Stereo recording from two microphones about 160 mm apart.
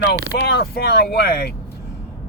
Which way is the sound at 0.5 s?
75° left (ahead or behind).